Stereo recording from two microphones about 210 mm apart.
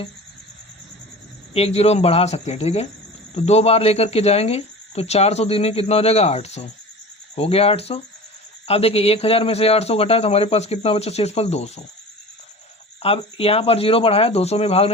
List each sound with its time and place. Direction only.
1.5 s speech: 30° left (ahead or behind)
13.0 s speech: 25° left (ahead or behind)